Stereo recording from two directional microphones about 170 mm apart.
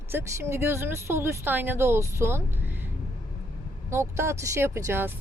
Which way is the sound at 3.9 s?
15° right (ahead or behind).